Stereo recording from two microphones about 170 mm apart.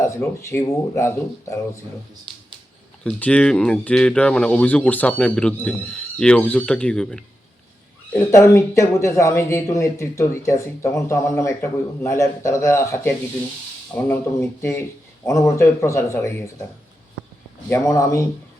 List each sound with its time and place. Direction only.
0.0 s speech: 15° left (ahead or behind)
3.0 s speech: 5° left (ahead or behind)
8.1 s speech: 15° left (ahead or behind)
17.7 s speech: 15° left (ahead or behind)